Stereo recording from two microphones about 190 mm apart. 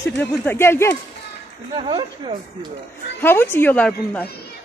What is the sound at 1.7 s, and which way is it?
Speech, 25° right (ahead or behind).